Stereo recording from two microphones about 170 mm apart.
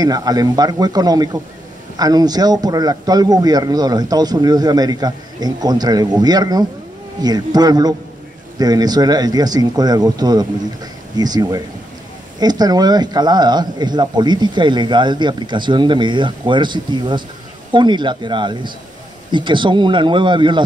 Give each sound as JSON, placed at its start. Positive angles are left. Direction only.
{"t": 0.0, "sound": "a man's voice", "side_deg": -20}